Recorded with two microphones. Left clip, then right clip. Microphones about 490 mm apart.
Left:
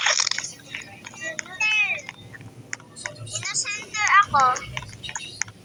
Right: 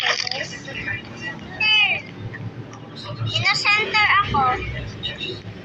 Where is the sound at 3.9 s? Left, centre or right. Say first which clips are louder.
Left 1 dB; left.